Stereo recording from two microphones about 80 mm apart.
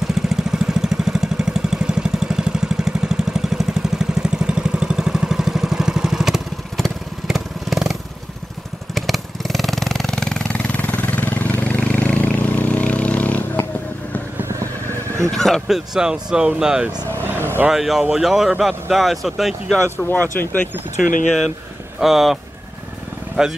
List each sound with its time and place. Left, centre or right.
0.1 s vehicle: centre
15.3 s a sound: centre
15.6 s speech: centre
17.4 s vehicle: right
17.6 s speech: centre
20.0 s speech: left
22.0 s speech: centre